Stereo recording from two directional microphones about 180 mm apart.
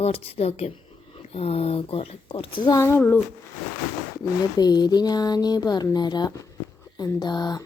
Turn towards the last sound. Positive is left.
turn(degrees=20)  # may be behind; listen again after turning